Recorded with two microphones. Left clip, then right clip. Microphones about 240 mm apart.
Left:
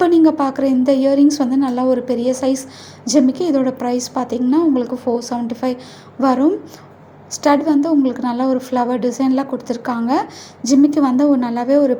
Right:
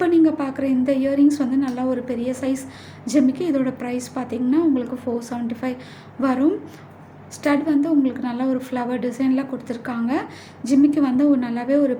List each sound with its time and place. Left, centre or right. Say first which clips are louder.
0.0 s a woman's voice: left 5 dB; centre